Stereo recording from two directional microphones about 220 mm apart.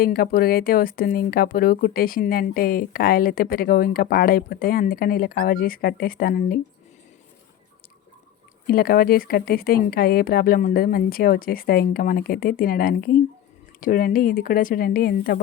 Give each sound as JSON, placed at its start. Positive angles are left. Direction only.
{"t": 0.0, "sound": "speech", "side_deg": 40}
{"t": 8.6, "sound": "speech", "side_deg": 45}